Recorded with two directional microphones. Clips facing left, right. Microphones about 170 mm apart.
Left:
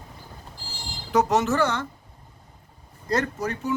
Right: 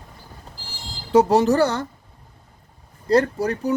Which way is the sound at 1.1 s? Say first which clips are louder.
Right 6 dB; 30° right (ahead or behind).